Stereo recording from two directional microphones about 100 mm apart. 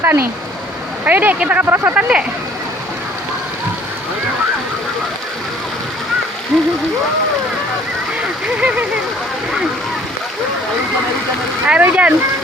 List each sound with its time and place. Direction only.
0.0 s speech: 25° right (ahead or behind)
6.5 s speech: 5° right (ahead or behind)
11.6 s speech: 15° right (ahead or behind)